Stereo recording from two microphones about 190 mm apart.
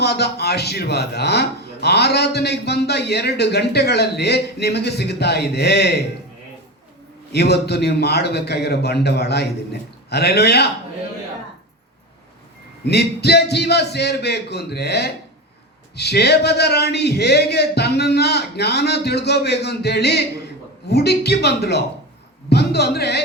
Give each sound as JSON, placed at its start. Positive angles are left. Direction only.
{"t": 0.0, "sound": "a man's voice", "side_deg": 60}
{"t": 7.3, "sound": "a man's voice", "side_deg": 60}
{"t": 12.8, "sound": "a man's voice", "side_deg": 60}